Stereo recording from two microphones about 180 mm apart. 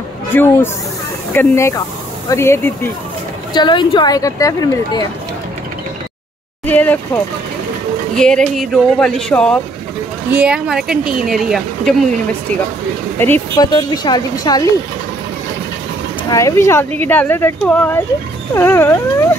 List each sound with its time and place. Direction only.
0.3 s speech: 10° left (ahead or behind)
3.5 s speech: 25° left (ahead or behind)
6.6 s speech: 10° left (ahead or behind)
8.2 s speech: 5° left (ahead or behind)
13.2 s speech: 10° left (ahead or behind)
13.6 s speech: 25° left (ahead or behind)
16.3 s speech: 15° left (ahead or behind)